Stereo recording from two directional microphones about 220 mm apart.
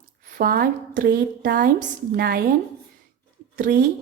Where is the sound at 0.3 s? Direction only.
40° right (ahead or behind).